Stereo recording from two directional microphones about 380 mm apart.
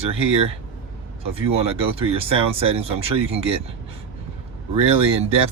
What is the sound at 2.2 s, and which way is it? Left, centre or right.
Speech, centre.